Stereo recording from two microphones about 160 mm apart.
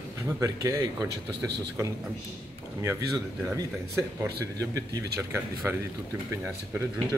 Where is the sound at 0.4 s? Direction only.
20° right (ahead or behind).